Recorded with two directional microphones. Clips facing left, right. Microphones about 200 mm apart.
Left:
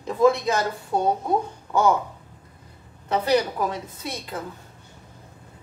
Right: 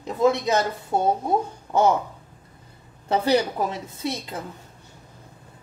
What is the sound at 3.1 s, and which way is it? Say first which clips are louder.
A woman's voice: right 1 dB; 30° right (ahead or behind).